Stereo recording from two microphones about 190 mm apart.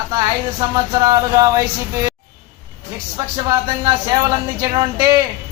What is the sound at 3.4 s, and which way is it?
Speech, 20° right (ahead or behind).